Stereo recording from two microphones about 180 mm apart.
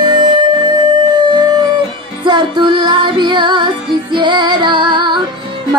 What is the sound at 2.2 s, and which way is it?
Music, 25° right (ahead or behind).